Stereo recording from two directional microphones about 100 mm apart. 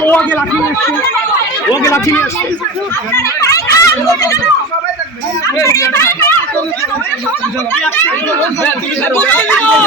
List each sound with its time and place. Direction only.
0.0 s speech: 15° left (ahead or behind)
1.7 s speech: 30° left (ahead or behind)
3.8 s speech: 35° left (ahead or behind)
5.5 s speech: 30° left (ahead or behind)
9.2 s speech: 15° left (ahead or behind)